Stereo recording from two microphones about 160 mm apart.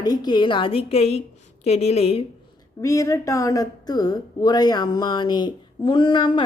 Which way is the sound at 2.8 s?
20° left (ahead or behind).